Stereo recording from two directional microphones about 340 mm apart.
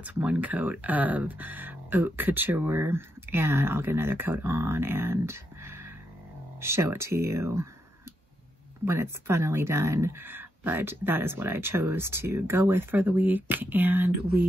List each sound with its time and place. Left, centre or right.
0.0 s speech: centre
8.8 s speech: centre